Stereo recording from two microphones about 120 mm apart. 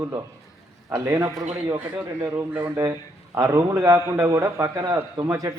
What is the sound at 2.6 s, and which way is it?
A man's voice, 25° right (ahead or behind).